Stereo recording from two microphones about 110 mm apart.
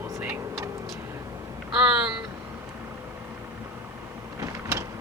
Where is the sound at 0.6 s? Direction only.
Centre (ahead or behind).